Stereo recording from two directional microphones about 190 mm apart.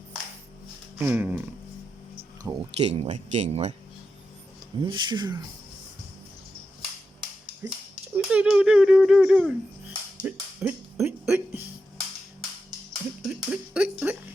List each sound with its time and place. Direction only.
0.9 s speech: 10° right (ahead or behind)
2.4 s speech: 20° right (ahead or behind)
3.0 s speech: 35° right (ahead or behind)
4.8 s speech: 25° right (ahead or behind)
7.6 s speech: 10° right (ahead or behind)
13.2 s speech: 5° right (ahead or behind)